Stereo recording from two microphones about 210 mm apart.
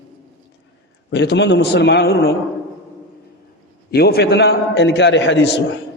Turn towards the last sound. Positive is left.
turn(degrees=55)  # may be behind; listen again after turning